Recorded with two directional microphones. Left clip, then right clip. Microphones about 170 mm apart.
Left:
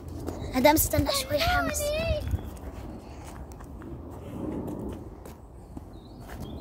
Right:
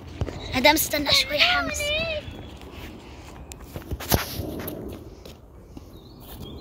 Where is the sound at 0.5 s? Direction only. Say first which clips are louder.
Right 2 dB; 15° left (ahead or behind).